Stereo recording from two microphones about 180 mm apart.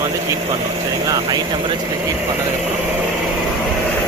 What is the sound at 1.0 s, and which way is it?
Speech, 20° right (ahead or behind).